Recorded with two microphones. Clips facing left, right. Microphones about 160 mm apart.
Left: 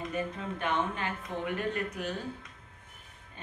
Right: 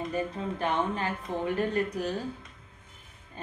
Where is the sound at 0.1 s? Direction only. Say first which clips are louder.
Right 3 dB; 35° right (ahead or behind).